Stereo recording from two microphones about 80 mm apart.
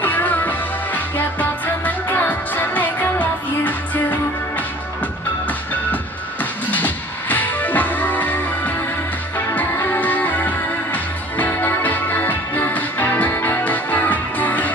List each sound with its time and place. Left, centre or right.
0.0 s music: left
6.4 s music: left